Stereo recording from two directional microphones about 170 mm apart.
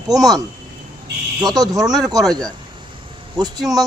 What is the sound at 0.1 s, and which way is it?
Speech, 20° right (ahead or behind).